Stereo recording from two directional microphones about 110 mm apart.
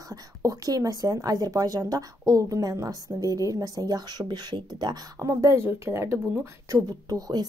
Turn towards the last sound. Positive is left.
turn(degrees=-35)  # may be behind; listen again after turning